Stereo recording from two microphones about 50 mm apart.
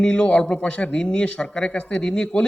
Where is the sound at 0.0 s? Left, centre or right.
Centre.